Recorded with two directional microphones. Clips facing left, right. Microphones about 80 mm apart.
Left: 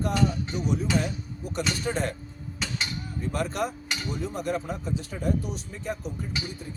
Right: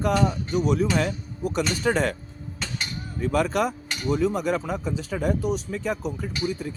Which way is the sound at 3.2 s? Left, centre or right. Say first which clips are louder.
Right 6 dB; right.